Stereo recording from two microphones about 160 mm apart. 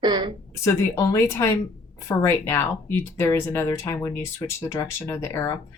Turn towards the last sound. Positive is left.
turn(degrees=20)  # may be behind; listen again after turning